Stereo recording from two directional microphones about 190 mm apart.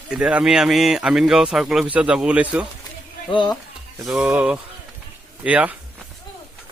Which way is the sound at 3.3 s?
25° left (ahead or behind).